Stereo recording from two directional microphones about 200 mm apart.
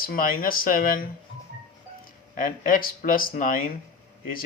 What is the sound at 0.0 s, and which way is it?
Speech, 45° left (ahead or behind).